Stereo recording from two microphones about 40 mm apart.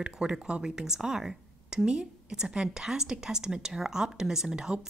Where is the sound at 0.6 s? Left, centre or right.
Centre.